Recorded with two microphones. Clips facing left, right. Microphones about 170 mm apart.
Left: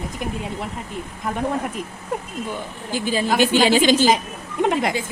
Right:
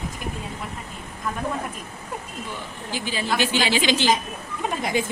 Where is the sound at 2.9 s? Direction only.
45° left (ahead or behind).